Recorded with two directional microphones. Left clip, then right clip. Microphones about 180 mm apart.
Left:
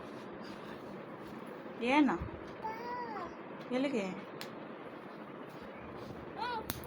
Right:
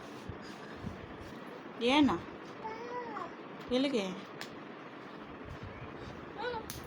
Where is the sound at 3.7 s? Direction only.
15° right (ahead or behind).